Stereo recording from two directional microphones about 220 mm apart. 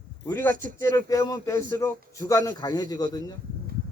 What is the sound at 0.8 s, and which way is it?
Speech, 15° left (ahead or behind).